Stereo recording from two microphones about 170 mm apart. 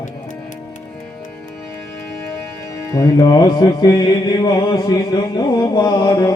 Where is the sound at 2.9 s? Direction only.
20° left (ahead or behind).